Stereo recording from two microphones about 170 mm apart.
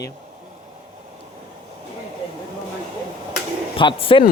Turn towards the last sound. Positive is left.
turn(degrees=30)  # may be behind; listen again after turning